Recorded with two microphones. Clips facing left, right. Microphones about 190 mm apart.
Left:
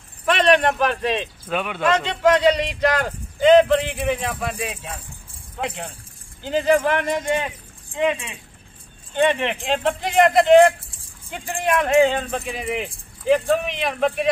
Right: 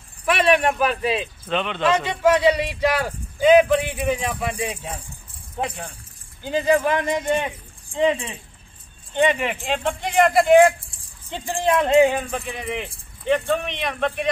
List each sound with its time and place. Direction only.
0.3 s speech: 10° right (ahead or behind)
1.5 s speech: 10° left (ahead or behind)
1.9 s speech: 10° right (ahead or behind)
4.6 s speech: 25° right (ahead or behind)
6.8 s speech: 15° right (ahead or behind)
7.9 s speech: 30° right (ahead or behind)
9.1 s speech: 15° right (ahead or behind)
11.2 s speech: 30° right (ahead or behind)
12.0 s speech: 10° right (ahead or behind)
12.3 s speech: 5° left (ahead or behind)